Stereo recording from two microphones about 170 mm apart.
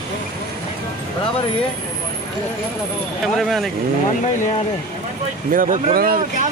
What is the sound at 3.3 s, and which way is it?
Speech, centre (ahead or behind).